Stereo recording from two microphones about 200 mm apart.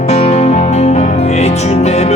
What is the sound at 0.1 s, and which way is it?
Music, 35° left (ahead or behind).